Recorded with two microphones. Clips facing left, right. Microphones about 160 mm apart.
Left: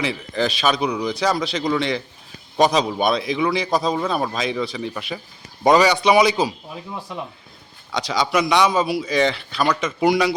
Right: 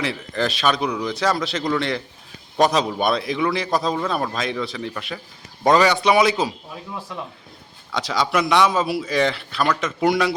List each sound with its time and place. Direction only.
0.0 s speech: centre (ahead or behind)
6.9 s speech: 15° left (ahead or behind)
7.9 s speech: centre (ahead or behind)